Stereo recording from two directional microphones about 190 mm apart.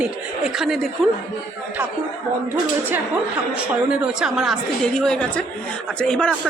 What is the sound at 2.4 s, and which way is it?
Speech, 10° right (ahead or behind).